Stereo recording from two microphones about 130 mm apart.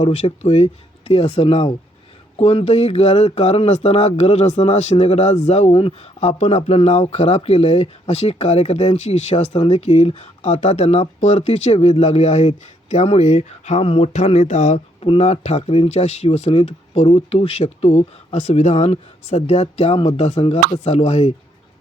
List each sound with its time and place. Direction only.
0.0 s speech: 50° left (ahead or behind)
15.0 s speech: 50° left (ahead or behind)